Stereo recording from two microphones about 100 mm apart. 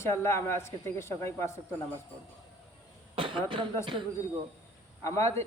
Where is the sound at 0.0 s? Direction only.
25° left (ahead or behind).